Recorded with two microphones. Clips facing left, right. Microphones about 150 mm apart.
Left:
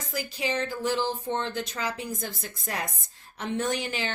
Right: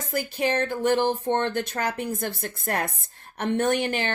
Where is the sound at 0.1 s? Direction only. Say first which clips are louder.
Right 5 dB; 55° right (ahead or behind).